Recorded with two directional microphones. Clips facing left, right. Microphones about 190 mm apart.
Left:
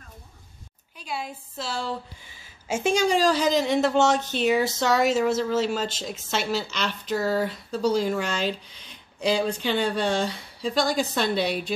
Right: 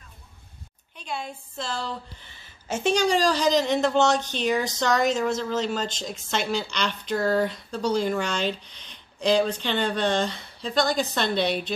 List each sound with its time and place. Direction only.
0.9 s a woman's voice: 5° left (ahead or behind)